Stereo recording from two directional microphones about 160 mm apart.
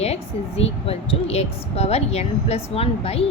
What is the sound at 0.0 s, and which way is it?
A woman's voice, 40° left (ahead or behind).